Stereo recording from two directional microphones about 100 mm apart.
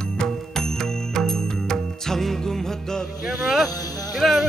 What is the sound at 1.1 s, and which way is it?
Music, 5° left (ahead or behind).